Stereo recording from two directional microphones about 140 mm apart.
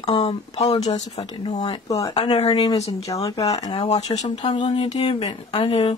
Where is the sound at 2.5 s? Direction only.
30° left (ahead or behind).